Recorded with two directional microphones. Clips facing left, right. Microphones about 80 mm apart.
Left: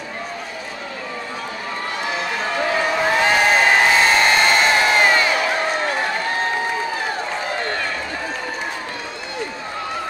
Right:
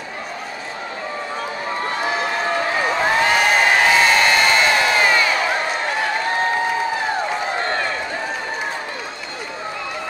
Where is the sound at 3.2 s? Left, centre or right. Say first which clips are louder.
Left 1 dB; left.